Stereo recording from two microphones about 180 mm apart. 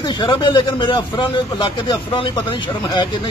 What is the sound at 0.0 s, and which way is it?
Speech, 25° left (ahead or behind).